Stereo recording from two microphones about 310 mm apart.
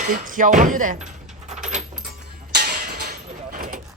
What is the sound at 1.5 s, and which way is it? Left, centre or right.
Keys jangling, right.